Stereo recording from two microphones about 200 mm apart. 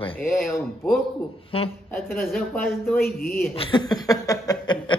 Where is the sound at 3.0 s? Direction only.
45° left (ahead or behind).